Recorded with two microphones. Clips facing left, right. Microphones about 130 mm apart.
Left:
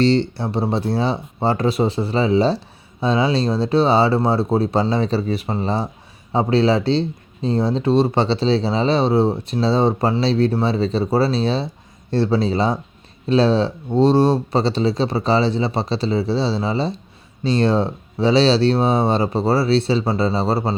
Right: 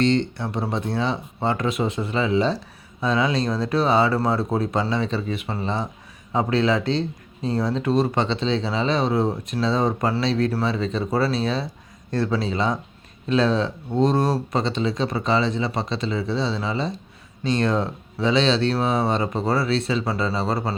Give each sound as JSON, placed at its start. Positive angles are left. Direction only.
{"t": 0.0, "sound": "speech", "side_deg": 30}